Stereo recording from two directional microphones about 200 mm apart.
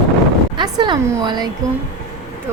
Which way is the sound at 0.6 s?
20° right (ahead or behind).